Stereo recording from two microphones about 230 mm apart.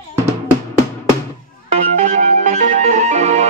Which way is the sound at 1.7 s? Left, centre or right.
Right.